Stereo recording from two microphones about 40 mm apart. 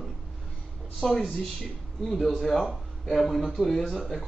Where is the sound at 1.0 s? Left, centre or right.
Centre.